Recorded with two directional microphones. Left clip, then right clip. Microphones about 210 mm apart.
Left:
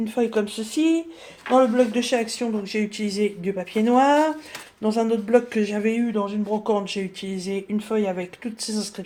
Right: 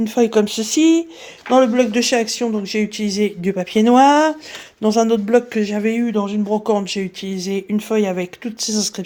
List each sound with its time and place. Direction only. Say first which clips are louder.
0.0 s speech: right 7 dB; 50° right (ahead or behind)